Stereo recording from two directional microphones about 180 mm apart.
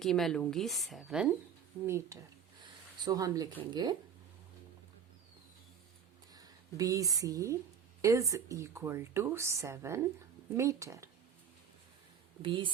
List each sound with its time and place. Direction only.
0.0 s a woman's voice: centre (ahead or behind)
3.0 s speech: 20° right (ahead or behind)
6.3 s speech: 20° right (ahead or behind)
12.4 s speech: 25° right (ahead or behind)